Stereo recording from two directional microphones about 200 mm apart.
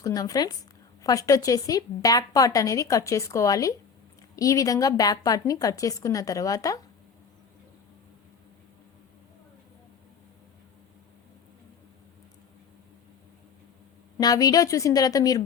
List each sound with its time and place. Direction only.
0.0 s a woman's voice: 20° left (ahead or behind)
14.2 s a woman's voice: 20° left (ahead or behind)